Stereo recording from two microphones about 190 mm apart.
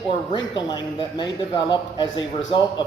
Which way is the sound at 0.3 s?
25° left (ahead or behind).